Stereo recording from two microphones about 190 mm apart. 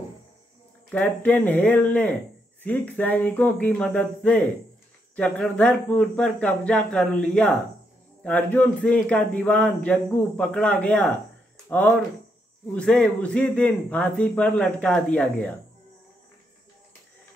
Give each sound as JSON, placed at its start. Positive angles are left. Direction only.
{"t": 0.9, "sound": "a man's voice", "side_deg": 5}
{"t": 12.7, "sound": "a man's voice", "side_deg": 5}